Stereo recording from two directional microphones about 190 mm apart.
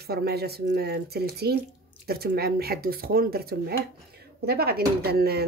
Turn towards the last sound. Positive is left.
turn(degrees=-55)  # may be behind; listen again after turning